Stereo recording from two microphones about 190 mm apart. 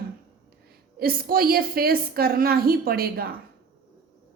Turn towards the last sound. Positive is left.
turn(degrees=-55)  # may be behind; listen again after turning